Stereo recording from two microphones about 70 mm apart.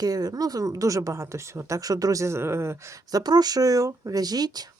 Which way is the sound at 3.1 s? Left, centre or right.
Right.